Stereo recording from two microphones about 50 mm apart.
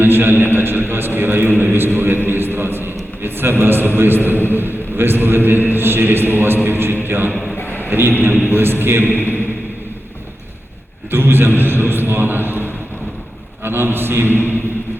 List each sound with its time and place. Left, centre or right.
0.0 s a man's voice: right
7.5 s a sound: left
7.9 s a man's voice: right
9.0 s speech: left
11.1 s a man's voice: right